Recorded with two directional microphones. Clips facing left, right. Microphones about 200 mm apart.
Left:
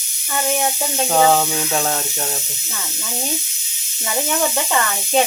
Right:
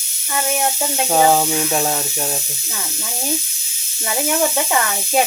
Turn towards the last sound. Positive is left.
turn(degrees=-10)  # may be behind; listen again after turning